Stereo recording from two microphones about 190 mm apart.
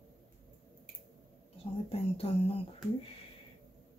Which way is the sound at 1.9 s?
30° left (ahead or behind).